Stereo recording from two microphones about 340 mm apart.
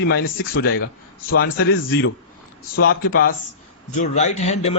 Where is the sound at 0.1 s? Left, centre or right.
Left.